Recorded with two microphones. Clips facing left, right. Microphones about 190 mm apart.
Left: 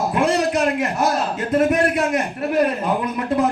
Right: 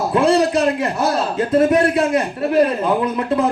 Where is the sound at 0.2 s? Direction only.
30° right (ahead or behind).